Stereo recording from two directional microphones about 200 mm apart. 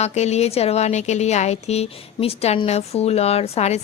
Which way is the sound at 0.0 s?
35° left (ahead or behind).